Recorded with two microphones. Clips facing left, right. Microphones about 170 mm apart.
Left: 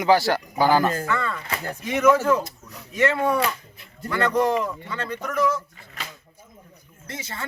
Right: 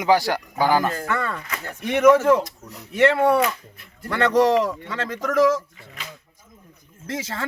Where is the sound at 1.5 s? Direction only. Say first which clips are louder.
Left 3 dB; 35° left (ahead or behind).